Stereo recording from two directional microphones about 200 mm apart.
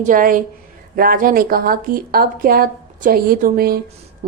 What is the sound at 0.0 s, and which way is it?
A woman's voice, 45° right (ahead or behind).